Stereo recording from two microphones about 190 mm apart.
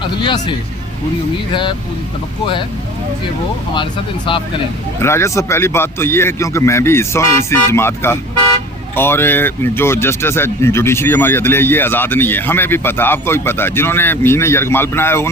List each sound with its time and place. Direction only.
0.2 s speech: 25° left (ahead or behind)
4.9 s speech: 15° left (ahead or behind)